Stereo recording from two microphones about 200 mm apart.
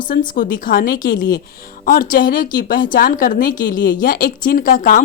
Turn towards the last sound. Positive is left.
turn(degrees=45)  # may be behind; listen again after turning